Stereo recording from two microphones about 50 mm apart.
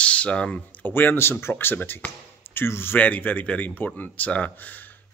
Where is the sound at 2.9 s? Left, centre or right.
Left.